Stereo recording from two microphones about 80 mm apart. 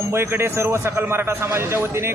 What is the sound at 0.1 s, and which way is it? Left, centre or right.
A man's voice, right.